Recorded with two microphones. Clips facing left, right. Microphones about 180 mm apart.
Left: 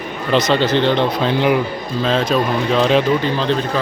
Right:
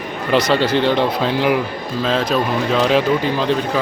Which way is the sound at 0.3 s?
10° right (ahead or behind).